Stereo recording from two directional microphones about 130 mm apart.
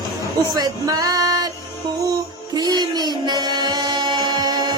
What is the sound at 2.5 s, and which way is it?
Child singing, 30° right (ahead or behind).